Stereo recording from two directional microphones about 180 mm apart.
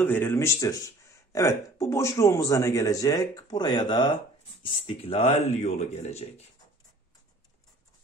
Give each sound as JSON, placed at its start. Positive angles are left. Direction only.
{"t": 0.0, "sound": "speech", "side_deg": 10}